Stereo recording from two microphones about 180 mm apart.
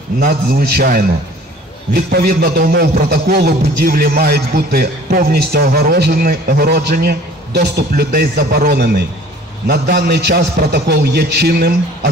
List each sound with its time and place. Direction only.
0.2 s a man's voice: 55° right (ahead or behind)